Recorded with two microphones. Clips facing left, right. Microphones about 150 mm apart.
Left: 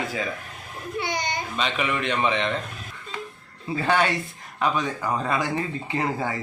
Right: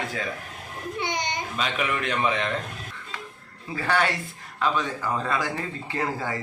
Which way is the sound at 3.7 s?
25° left (ahead or behind).